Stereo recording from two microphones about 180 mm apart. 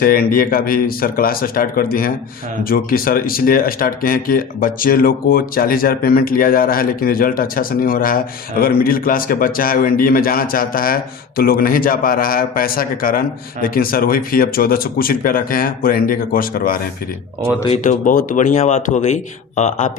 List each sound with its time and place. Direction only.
0.0 s speech: 55° left (ahead or behind)